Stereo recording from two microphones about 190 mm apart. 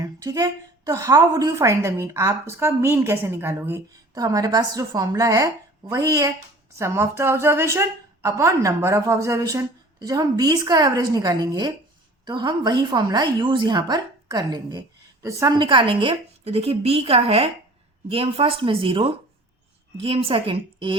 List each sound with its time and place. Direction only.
0.0 s a woman's voice: 20° right (ahead or behind)